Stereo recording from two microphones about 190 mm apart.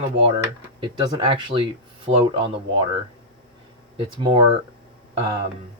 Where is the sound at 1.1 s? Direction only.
25° right (ahead or behind).